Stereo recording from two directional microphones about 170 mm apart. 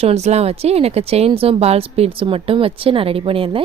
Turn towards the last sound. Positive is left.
turn(degrees=-30)  # may be behind; listen again after turning